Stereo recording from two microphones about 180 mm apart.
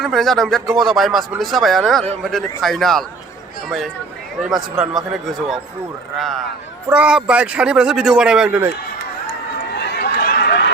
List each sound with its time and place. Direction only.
0.0 s speech: centre (ahead or behind)
4.4 s speech: centre (ahead or behind)
9.8 s run: 65° left (ahead or behind)